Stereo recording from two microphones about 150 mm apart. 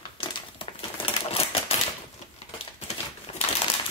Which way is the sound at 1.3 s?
40° left (ahead or behind).